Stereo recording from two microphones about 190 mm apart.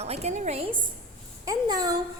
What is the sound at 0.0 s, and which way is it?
Speech, 35° right (ahead or behind).